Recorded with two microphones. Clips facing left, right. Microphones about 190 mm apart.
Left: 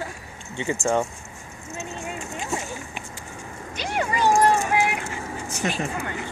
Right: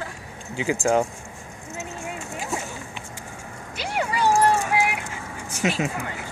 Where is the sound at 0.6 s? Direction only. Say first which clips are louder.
Right 2 dB; 5° right (ahead or behind).